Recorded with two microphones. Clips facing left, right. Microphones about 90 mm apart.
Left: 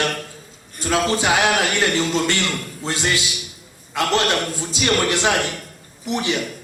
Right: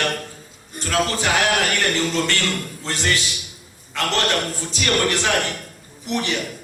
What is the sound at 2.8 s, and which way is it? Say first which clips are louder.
Music: left 1 dB; 15° left (ahead or behind).